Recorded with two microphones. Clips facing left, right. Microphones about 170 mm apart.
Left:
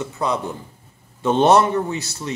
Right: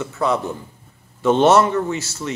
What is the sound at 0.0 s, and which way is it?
Speech, 15° left (ahead or behind).